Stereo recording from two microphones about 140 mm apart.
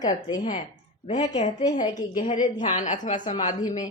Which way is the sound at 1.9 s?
65° left (ahead or behind).